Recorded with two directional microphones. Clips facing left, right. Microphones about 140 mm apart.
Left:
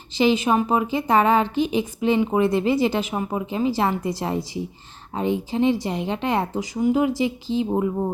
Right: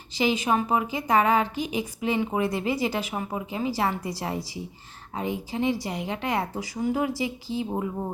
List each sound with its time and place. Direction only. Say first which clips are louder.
0.2 s a woman's voice: left 5 dB; 25° left (ahead or behind)